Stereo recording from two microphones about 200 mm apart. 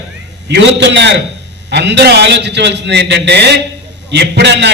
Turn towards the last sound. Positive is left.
turn(degrees=-55)  # may be behind; listen again after turning